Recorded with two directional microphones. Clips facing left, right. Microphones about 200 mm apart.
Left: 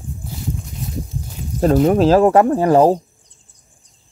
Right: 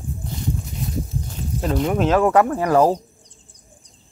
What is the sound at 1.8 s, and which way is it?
Speech, 35° left (ahead or behind).